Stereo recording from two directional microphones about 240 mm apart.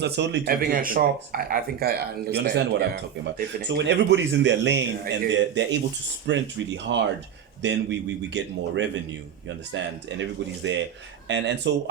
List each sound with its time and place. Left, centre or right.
0.0 s speech: right
0.6 s speech: right